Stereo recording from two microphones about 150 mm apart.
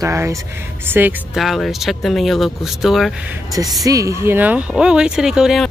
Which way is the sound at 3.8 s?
20° right (ahead or behind).